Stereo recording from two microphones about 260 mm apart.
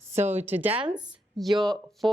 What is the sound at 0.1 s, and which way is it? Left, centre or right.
Speech, centre.